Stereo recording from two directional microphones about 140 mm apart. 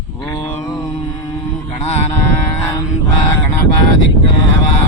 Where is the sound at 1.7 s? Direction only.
50° left (ahead or behind).